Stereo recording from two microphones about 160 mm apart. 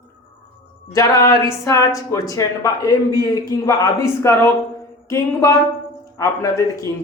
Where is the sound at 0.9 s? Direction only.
20° left (ahead or behind).